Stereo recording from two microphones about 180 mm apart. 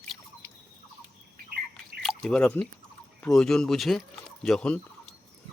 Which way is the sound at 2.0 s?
Centre (ahead or behind).